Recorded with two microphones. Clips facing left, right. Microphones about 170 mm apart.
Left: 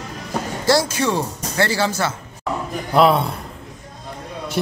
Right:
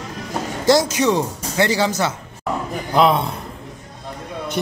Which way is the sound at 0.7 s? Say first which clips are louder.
Right 3 dB; 20° right (ahead or behind).